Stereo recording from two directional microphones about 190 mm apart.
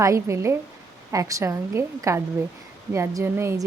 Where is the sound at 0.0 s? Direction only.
15° right (ahead or behind).